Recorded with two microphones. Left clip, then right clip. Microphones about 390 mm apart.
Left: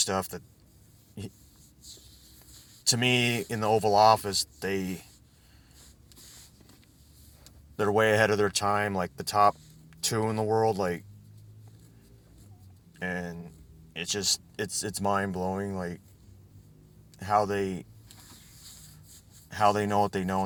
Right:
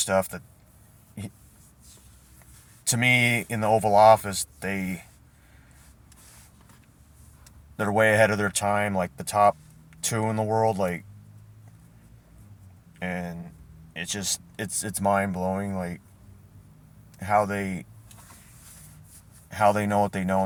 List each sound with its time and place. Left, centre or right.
0.0 s speech: left
2.8 s speech: left
7.8 s speech: left
13.0 s speech: left
17.2 s speech: left
19.5 s speech: left